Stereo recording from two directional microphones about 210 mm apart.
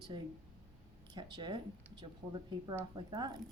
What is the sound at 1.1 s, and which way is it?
Speech, 20° right (ahead or behind).